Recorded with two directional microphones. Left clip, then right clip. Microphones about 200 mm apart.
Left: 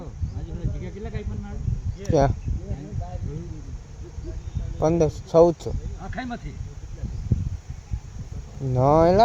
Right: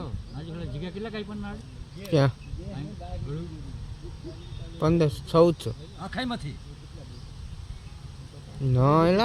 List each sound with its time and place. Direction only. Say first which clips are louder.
0.8 s speech: right 4 dB; 25° right (ahead or behind)
2.0 s speech: left 4 dB; 15° right (ahead or behind)
4.8 s speech: left 3 dB; 15° right (ahead or behind)
8.7 s speech: left 5 dB; 15° right (ahead or behind)